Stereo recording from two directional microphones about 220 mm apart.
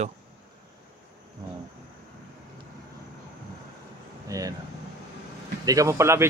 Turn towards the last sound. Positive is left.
turn(degrees=-10)  # may be behind; listen again after turning